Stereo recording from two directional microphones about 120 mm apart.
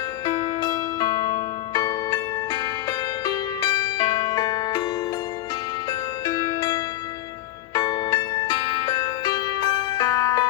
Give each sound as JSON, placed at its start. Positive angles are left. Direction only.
{"t": 0.3, "sound": "music", "side_deg": 35}
{"t": 5.9, "sound": "music", "side_deg": 35}